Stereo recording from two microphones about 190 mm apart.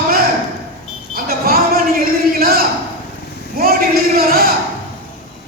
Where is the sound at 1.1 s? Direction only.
50° right (ahead or behind).